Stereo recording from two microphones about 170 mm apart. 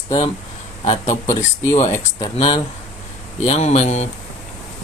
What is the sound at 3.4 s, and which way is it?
Speech, 40° left (ahead or behind).